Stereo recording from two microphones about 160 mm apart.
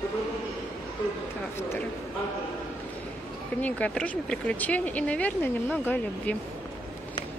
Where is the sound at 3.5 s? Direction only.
10° left (ahead or behind).